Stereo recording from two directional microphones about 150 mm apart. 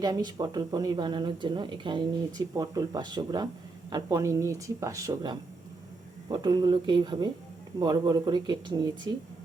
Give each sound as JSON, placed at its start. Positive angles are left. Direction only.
{"t": 0.0, "sound": "speech", "side_deg": -30}